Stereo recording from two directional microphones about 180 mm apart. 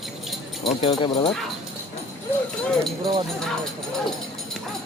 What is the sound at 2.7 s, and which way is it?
Speech, centre (ahead or behind).